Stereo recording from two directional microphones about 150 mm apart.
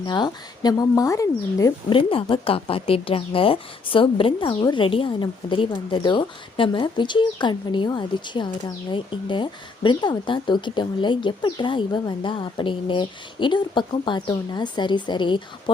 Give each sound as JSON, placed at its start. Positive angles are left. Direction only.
{"t": 0.0, "sound": "speech", "side_deg": 25}
{"t": 1.9, "sound": "a woman's voice", "side_deg": 35}